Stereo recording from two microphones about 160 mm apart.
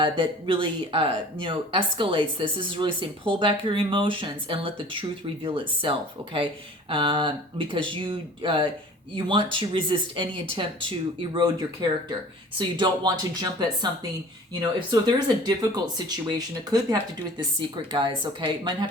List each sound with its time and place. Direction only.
0.0 s speech: 30° right (ahead or behind)